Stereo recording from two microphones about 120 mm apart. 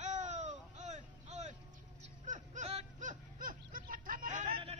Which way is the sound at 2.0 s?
85° right.